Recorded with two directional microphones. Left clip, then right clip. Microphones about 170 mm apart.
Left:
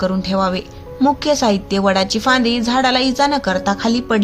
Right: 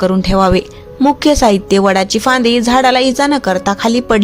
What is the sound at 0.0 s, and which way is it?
A woman's voice, 45° right (ahead or behind).